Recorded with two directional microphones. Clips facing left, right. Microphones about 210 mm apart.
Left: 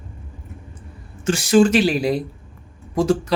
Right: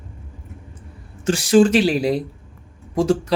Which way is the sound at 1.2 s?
35° right (ahead or behind).